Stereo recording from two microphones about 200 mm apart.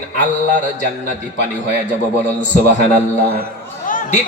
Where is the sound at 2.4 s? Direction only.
35° left (ahead or behind).